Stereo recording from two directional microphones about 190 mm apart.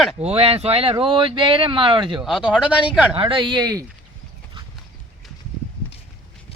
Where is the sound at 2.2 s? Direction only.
Centre (ahead or behind).